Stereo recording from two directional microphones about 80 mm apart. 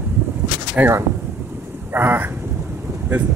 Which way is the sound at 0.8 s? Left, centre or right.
Centre.